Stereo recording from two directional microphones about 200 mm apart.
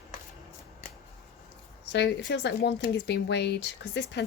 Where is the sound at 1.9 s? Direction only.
60° left (ahead or behind).